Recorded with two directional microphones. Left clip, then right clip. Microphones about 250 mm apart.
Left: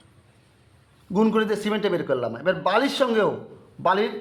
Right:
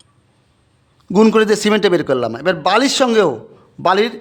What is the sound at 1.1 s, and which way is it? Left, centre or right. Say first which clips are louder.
A man's voice: right 10 dB; right.